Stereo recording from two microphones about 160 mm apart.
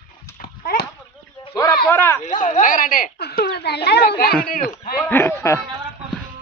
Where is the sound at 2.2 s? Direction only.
50° left (ahead or behind); by 4.3 s 75° left (ahead or behind).